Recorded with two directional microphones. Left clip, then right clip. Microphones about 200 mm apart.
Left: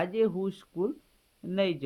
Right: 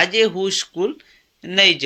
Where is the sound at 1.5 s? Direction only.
Centre (ahead or behind).